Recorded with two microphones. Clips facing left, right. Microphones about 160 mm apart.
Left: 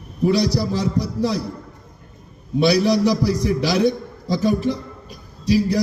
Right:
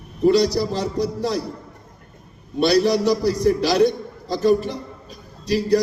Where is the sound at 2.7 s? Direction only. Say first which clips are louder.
Even; 50° right (ahead or behind).